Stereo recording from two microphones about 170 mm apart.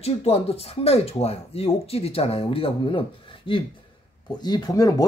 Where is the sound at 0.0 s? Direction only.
40° left (ahead or behind).